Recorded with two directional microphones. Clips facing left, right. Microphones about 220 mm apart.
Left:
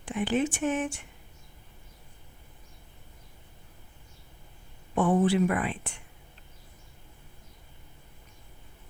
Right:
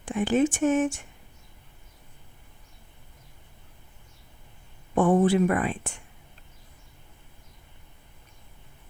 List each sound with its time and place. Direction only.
0.1 s speech: 45° right (ahead or behind)
4.9 s speech: 50° right (ahead or behind)